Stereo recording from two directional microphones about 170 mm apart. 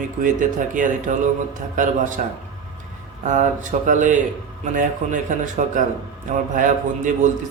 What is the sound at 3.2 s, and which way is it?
A man's voice, 45° right (ahead or behind).